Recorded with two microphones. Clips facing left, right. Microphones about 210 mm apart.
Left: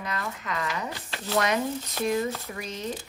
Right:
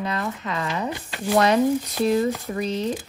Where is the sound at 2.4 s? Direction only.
35° right (ahead or behind).